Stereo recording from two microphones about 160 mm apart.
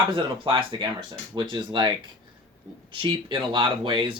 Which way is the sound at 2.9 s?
30° right (ahead or behind).